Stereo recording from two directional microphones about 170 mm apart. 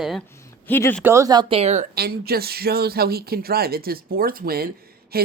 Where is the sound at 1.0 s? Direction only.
20° right (ahead or behind); by 1.9 s 40° right (ahead or behind).